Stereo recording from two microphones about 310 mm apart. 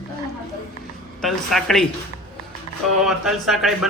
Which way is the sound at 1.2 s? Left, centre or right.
Centre.